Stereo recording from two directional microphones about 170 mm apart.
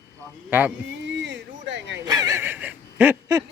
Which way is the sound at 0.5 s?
10° right (ahead or behind).